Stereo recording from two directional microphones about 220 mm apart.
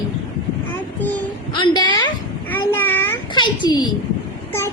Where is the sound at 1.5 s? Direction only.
20° left (ahead or behind).